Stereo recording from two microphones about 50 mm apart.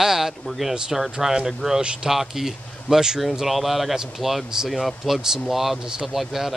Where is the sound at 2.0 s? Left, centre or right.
Centre.